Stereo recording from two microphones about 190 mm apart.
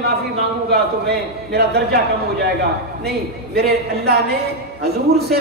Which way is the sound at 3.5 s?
55° right (ahead or behind).